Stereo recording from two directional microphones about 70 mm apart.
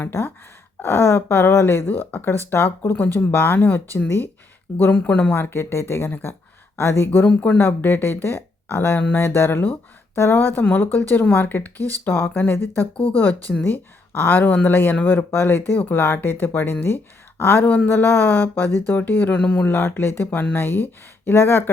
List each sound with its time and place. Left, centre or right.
0.0 s speech: left
11.8 s speech: right
12.0 s speech: left
19.4 s speech: centre
19.6 s speech: left